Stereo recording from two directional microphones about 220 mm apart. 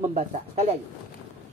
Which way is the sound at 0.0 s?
30° right (ahead or behind).